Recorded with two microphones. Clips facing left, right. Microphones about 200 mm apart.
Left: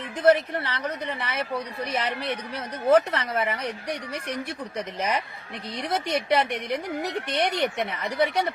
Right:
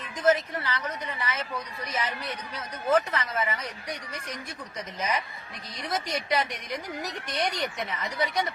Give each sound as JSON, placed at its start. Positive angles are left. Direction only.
{"t": 0.2, "sound": "a woman's voice", "side_deg": 60}